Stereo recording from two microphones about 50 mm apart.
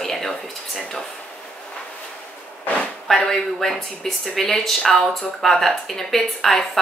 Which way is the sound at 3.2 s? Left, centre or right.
Centre.